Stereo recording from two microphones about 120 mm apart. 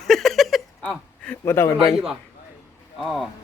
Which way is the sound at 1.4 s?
20° left (ahead or behind).